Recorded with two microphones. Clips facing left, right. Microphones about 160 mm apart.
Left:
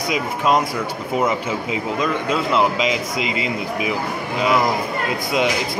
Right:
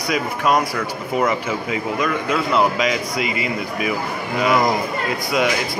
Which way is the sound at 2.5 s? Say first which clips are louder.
Right 1 dB; 20° left (ahead or behind).